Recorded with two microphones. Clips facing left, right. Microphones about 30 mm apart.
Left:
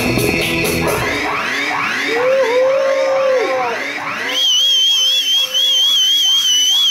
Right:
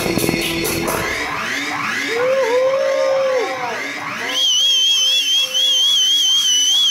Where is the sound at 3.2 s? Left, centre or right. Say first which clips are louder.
Left 4 dB; centre.